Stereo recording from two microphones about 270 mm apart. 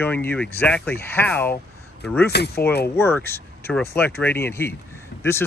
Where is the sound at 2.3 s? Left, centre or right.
Left.